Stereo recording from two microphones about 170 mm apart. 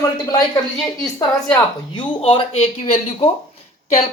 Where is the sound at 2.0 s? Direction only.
30° left (ahead or behind).